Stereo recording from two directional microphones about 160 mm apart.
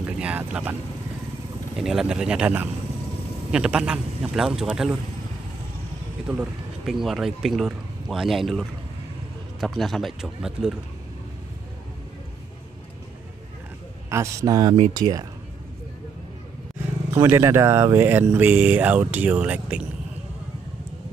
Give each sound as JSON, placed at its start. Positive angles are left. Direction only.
{"t": 0.0, "sound": "speech", "side_deg": -10}
{"t": 1.8, "sound": "speech", "side_deg": 0}
{"t": 6.2, "sound": "speech", "side_deg": -5}
{"t": 14.0, "sound": "a man's voice", "side_deg": -20}
{"t": 17.1, "sound": "speech", "side_deg": -15}